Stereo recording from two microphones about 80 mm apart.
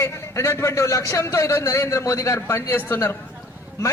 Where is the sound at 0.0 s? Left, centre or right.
Left.